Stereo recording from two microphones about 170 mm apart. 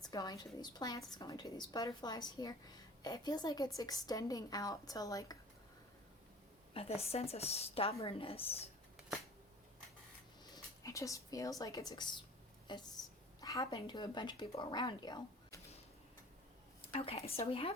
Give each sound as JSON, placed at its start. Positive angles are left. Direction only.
{"t": 0.0, "sound": "a woman's voice", "side_deg": 25}
{"t": 6.7, "sound": "a woman's voice", "side_deg": 35}
{"t": 10.5, "sound": "a woman's voice", "side_deg": 20}
{"t": 16.9, "sound": "a woman's voice", "side_deg": 35}